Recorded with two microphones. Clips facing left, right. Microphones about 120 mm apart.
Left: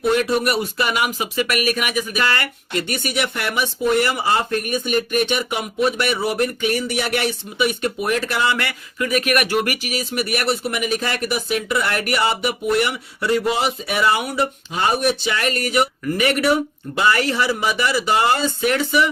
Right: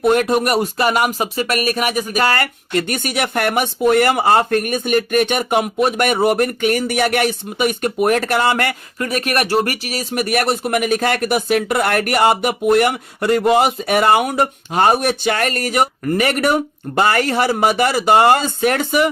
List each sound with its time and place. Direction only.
0.0 s speech: 50° right (ahead or behind)
9.0 s speech: 35° right (ahead or behind); by 19.1 s 50° right (ahead or behind)